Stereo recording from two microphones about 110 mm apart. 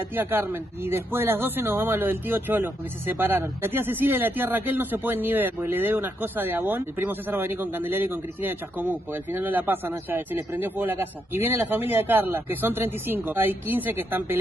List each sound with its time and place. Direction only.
0.1 s speech: 20° right (ahead or behind)